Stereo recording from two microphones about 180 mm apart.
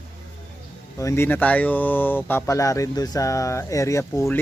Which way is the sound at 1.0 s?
15° left (ahead or behind).